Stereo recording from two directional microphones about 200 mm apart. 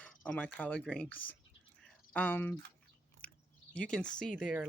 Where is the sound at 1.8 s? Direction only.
5° left (ahead or behind).